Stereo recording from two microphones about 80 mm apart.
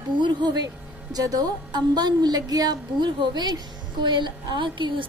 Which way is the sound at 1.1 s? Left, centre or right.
Right.